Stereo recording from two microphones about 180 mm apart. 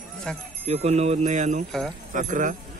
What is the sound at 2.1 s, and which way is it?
Speech, 45° right (ahead or behind).